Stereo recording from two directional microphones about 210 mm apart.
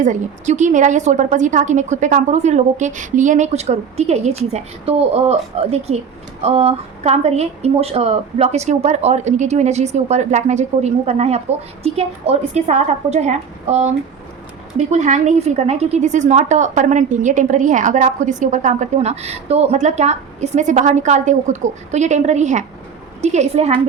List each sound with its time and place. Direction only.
0.0 s a woman's voice: 35° right (ahead or behind)